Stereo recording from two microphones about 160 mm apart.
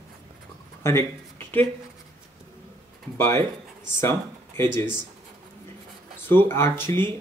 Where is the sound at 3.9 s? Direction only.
15° left (ahead or behind).